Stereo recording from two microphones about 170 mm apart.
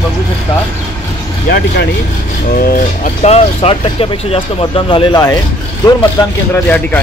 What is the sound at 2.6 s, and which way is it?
Speech, 55° left (ahead or behind).